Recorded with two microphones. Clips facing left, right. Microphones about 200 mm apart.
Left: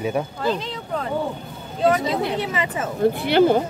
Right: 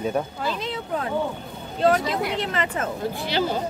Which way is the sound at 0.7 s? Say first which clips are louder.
Even; 5° right (ahead or behind).